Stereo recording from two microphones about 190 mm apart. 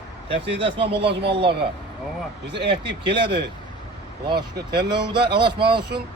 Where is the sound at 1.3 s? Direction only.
30° right (ahead or behind).